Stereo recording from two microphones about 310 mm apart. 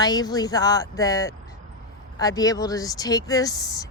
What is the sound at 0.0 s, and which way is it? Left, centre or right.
Speech, centre.